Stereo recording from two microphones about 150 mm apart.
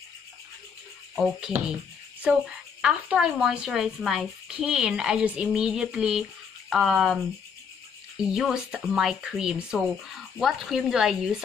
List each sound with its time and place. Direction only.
1.1 s a woman's voice: 5° right (ahead or behind)
2.8 s a woman's voice: 5° right (ahead or behind)
8.2 s a woman's voice: 5° right (ahead or behind)